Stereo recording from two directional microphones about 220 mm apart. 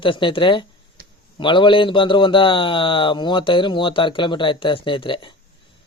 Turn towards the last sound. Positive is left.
turn(degrees=20)  # may be behind; listen again after turning